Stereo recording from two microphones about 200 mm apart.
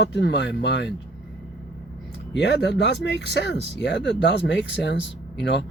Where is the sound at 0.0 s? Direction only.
60° left (ahead or behind).